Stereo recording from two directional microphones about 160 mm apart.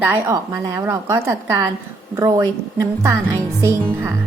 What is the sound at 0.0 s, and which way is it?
A woman's voice, 10° right (ahead or behind).